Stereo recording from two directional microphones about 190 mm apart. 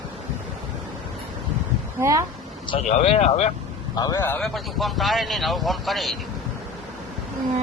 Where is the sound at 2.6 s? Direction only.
30° left (ahead or behind).